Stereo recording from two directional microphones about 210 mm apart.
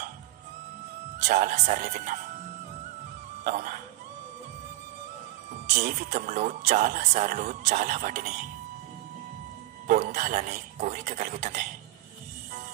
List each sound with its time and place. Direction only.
1.2 s speech: 35° right (ahead or behind)
3.4 s speech: 40° right (ahead or behind)
5.7 s speech: 35° right (ahead or behind)
9.8 s speech: 40° right (ahead or behind)